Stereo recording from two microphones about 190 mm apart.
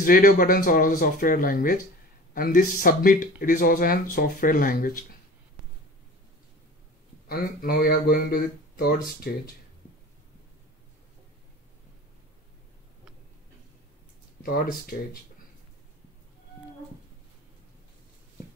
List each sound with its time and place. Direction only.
0.0 s speech: 50° left (ahead or behind)
7.2 s speech: 55° left (ahead or behind)
14.4 s speech: 50° left (ahead or behind)